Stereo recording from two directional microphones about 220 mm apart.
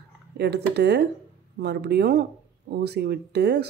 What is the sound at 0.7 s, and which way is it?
Speech, 50° right (ahead or behind).